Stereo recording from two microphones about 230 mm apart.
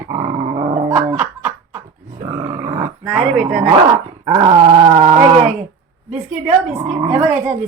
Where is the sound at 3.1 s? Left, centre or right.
Right.